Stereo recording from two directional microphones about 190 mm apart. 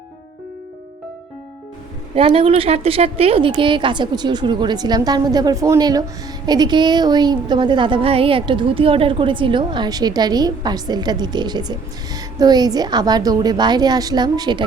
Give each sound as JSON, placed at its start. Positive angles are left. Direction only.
{"t": 2.1, "sound": "a woman's voice", "side_deg": -30}